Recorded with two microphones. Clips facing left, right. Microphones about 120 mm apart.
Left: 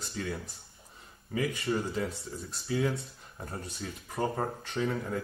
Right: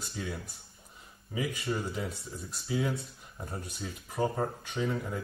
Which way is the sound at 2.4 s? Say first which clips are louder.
Left 2 dB; centre (ahead or behind).